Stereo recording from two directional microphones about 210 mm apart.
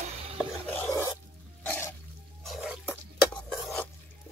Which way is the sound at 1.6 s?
10° left (ahead or behind).